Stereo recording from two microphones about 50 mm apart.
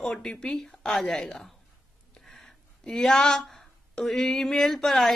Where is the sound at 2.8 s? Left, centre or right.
Centre.